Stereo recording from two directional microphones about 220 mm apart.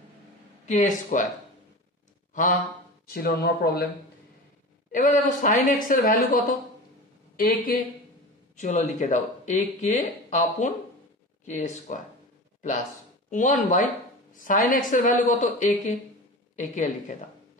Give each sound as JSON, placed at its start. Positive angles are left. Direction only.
{"t": 0.7, "sound": "speech", "side_deg": 35}
{"t": 3.1, "sound": "speech", "side_deg": 45}
{"t": 4.9, "sound": "speech", "side_deg": 35}
{"t": 13.3, "sound": "speech", "side_deg": 35}